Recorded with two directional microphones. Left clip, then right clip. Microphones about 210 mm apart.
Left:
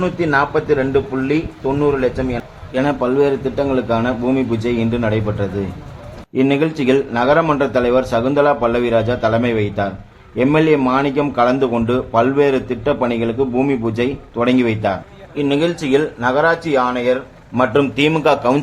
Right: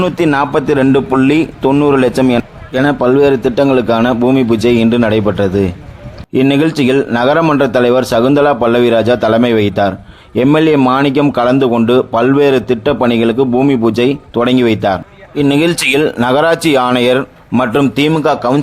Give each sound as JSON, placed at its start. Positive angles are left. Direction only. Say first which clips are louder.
{"t": 0.0, "sound": "a man's voice", "louder": "right 4 dB", "side_deg": -40}
{"t": 2.7, "sound": "a man's voice", "louder": "right 6 dB", "side_deg": -30}